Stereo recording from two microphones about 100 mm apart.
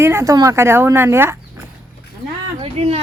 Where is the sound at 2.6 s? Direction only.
90° right.